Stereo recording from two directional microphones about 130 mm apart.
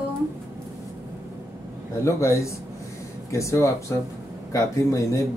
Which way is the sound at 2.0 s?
20° left (ahead or behind).